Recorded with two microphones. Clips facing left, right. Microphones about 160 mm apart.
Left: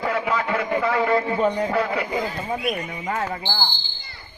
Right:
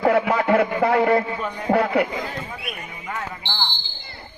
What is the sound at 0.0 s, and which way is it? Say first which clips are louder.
A man's voice: right 5 dB; 55° right (ahead or behind).